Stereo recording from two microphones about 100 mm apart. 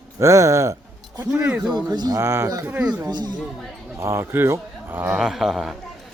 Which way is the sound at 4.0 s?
25° right (ahead or behind).